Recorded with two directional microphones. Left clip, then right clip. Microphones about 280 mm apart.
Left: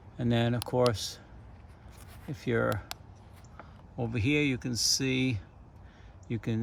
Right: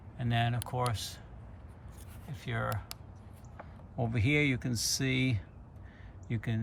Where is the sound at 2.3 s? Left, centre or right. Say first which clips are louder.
Left 7 dB; left.